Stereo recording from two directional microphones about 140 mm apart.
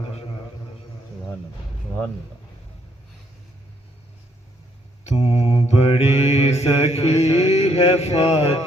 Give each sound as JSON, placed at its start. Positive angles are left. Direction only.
{"t": 5.0, "sound": "mantra", "side_deg": 50}